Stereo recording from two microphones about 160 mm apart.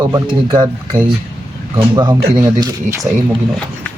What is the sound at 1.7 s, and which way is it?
Speech, 25° right (ahead or behind).